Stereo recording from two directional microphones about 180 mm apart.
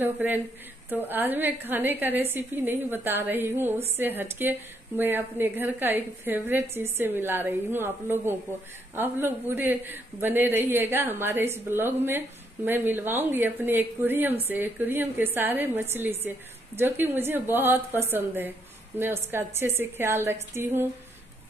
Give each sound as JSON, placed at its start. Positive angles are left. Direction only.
{"t": 0.0, "sound": "a woman's voice", "side_deg": -10}